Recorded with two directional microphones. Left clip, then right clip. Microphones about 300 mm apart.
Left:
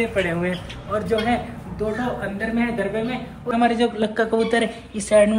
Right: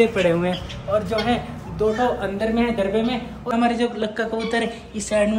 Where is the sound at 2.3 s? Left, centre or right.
Centre.